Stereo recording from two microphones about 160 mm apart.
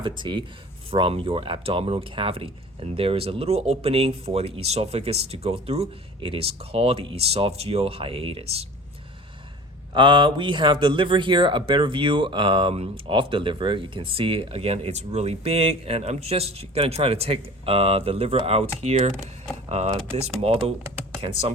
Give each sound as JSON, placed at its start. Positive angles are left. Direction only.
{"t": 0.0, "sound": "speech", "side_deg": -30}
{"t": 9.9, "sound": "speech", "side_deg": -30}